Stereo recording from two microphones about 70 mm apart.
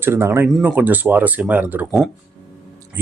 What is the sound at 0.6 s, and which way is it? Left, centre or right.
Speech, right.